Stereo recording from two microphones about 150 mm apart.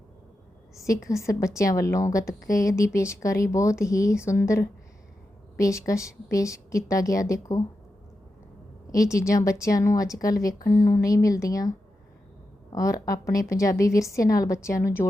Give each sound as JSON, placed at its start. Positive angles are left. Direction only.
{"t": 1.3, "sound": "a woman's voice", "side_deg": 20}
{"t": 8.9, "sound": "a woman's voice", "side_deg": 20}
{"t": 12.7, "sound": "a woman's voice", "side_deg": 20}